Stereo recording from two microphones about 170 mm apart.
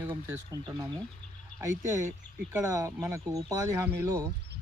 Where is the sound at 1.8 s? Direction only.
15° right (ahead or behind).